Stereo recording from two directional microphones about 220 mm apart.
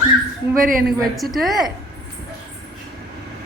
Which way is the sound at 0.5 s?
40° right (ahead or behind).